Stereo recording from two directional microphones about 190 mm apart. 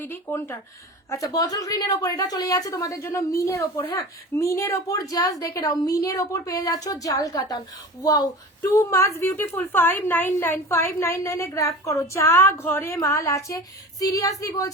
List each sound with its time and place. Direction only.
0.0 s a woman's voice: 10° left (ahead or behind)